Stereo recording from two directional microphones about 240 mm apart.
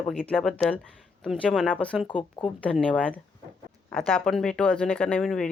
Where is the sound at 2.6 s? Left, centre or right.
Centre.